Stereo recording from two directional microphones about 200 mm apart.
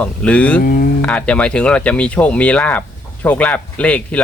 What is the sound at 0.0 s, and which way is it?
Speech, 5° left (ahead or behind).